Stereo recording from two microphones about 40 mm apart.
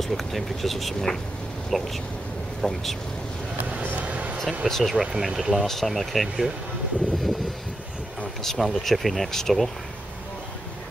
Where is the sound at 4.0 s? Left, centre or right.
Right.